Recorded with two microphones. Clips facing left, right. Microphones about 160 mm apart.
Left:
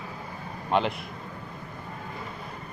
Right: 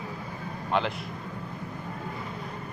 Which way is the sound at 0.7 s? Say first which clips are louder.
Left 2 dB; 15° left (ahead or behind).